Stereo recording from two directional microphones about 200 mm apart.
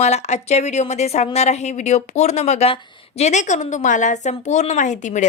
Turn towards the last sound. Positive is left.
turn(degrees=35)  # may be behind; listen again after turning